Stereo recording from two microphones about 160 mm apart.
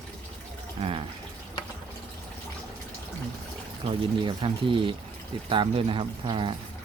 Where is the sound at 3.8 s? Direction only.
30° right (ahead or behind).